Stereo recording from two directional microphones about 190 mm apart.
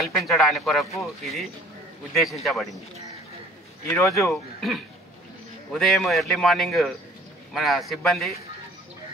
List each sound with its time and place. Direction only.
0.0 s a man's voice: centre (ahead or behind)
3.8 s speech: 15° left (ahead or behind)
4.6 s a man's voice: centre (ahead or behind)